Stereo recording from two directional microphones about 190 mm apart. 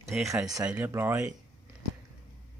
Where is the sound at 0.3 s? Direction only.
15° right (ahead or behind).